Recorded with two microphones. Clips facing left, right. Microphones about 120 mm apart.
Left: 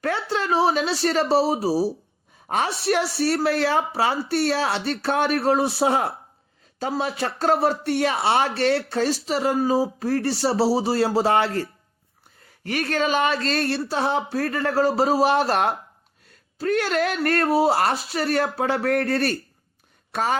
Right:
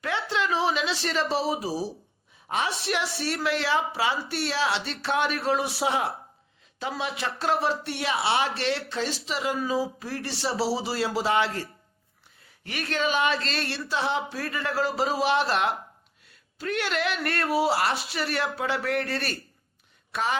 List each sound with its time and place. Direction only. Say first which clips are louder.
0.0 s speech: left 3 dB; 40° left (ahead or behind)